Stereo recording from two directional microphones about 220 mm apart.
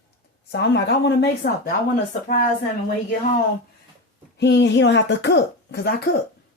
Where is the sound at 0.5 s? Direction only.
50° left (ahead or behind).